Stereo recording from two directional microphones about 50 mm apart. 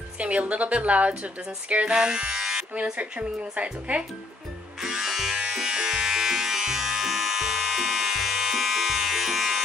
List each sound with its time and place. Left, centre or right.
0.2 s speech: right
2.7 s speech: right
4.8 s electric shaver: centre